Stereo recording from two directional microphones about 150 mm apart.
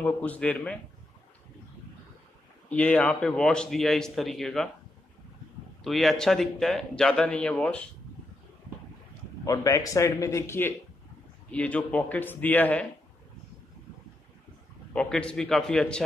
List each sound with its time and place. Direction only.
0.0 s a man's voice: 10° left (ahead or behind)
2.7 s speech: 10° left (ahead or behind)
5.9 s speech: centre (ahead or behind)
9.4 s a man's voice: 20° left (ahead or behind)
14.9 s speech: 5° left (ahead or behind)